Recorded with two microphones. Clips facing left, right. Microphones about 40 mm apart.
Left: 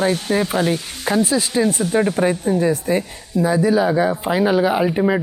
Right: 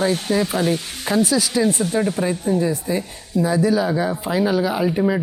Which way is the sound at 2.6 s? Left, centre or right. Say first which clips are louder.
Left 3 dB; left.